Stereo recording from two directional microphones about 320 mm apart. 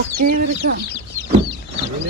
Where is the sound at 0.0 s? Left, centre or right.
Right.